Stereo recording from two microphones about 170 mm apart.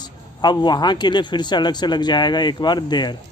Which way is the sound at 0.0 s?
25° left (ahead or behind).